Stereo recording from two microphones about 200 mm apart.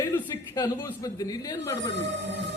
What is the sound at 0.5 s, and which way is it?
A woman's voice, 20° left (ahead or behind).